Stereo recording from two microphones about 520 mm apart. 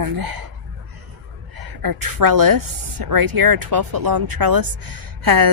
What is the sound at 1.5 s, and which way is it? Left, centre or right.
Speech, right.